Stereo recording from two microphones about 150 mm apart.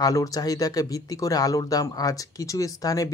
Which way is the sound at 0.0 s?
25° left (ahead or behind).